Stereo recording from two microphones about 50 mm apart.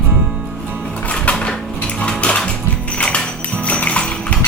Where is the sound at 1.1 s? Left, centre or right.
Left.